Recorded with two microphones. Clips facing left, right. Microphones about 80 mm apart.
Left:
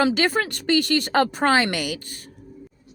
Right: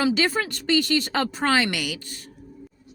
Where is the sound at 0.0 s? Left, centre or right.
Left.